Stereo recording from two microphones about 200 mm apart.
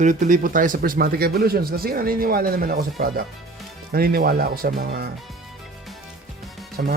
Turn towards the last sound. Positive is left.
turn(degrees=-50)  # may be behind; listen again after turning